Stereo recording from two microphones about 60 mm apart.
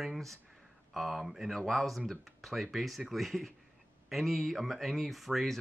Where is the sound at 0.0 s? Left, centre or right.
Centre.